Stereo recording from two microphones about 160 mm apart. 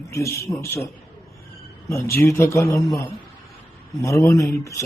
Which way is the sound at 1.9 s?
20° left (ahead or behind).